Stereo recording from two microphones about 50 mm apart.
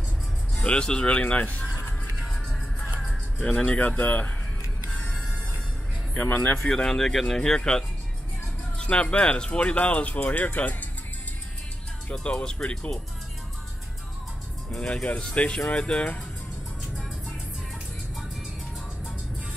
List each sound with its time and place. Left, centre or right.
0.6 s speech: centre
2.2 s music: centre
3.3 s speech: centre
3.7 s speech: left
6.1 s speech: left
6.8 s speech: centre; by 10.9 s left
12.1 s speech: left
14.8 s speech: left